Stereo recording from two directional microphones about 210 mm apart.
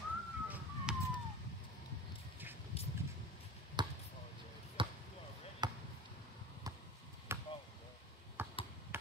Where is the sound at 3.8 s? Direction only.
20° right (ahead or behind).